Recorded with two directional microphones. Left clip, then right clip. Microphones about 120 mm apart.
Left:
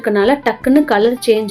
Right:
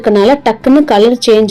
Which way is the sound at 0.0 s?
40° right (ahead or behind).